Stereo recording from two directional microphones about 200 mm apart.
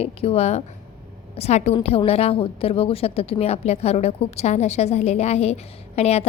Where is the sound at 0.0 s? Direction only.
30° left (ahead or behind).